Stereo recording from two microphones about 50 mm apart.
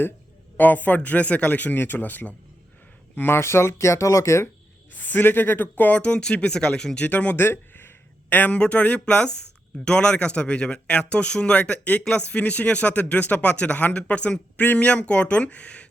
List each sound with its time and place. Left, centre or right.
0.5 s speech: left
3.2 s speech: left
4.9 s speech: left
6.0 s speech: left
7.0 s speech: left
7.3 s a sound: left
8.3 s a man's voice: left
8.5 s speech: left